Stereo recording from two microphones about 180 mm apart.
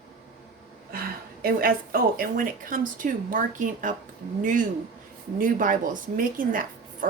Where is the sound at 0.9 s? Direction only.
55° right (ahead or behind).